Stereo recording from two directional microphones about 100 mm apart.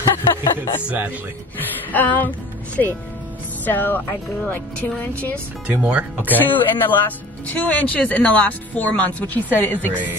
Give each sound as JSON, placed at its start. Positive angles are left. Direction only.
{"t": 0.0, "sound": "music", "side_deg": 50}
{"t": 0.8, "sound": "speech", "side_deg": -15}
{"t": 1.9, "sound": "speech", "side_deg": 15}
{"t": 5.8, "sound": "speech", "side_deg": -10}
{"t": 6.3, "sound": "speech", "side_deg": 20}